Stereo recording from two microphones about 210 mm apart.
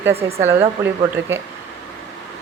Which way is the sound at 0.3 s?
10° right (ahead or behind).